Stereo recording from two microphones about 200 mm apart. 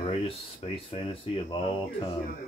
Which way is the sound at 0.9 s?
25° left (ahead or behind).